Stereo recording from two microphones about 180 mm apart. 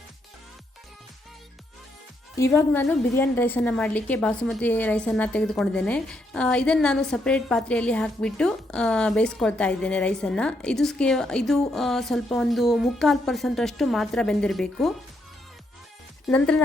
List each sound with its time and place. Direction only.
2.4 s a woman's voice: 10° left (ahead or behind)
16.3 s speech: 5° left (ahead or behind)